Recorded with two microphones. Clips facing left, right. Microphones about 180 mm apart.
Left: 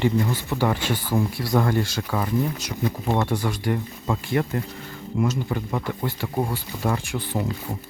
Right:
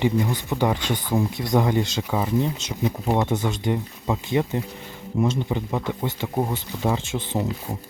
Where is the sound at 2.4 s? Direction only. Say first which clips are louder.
Right 1 dB; 25° right (ahead or behind).